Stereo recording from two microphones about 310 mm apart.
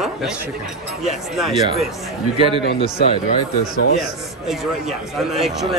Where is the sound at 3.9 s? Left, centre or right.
Centre.